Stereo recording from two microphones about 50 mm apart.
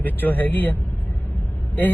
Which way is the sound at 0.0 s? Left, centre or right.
Left.